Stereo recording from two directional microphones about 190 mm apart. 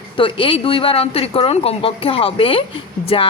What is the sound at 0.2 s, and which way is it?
Speech, 25° left (ahead or behind).